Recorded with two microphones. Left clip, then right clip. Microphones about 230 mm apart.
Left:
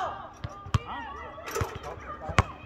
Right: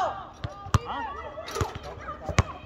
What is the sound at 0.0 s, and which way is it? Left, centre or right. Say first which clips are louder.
Chop: right 4 dB; centre.